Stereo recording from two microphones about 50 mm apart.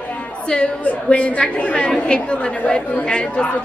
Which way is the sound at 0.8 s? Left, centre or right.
Left.